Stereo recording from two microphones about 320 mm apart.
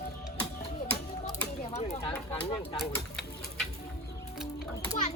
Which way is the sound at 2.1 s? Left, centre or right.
Centre.